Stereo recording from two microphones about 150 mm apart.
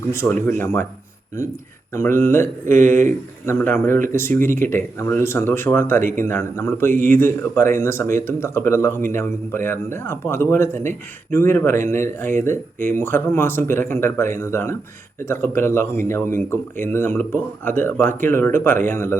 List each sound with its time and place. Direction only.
0.1 s speech: 15° left (ahead or behind)
1.9 s speech: 15° left (ahead or behind)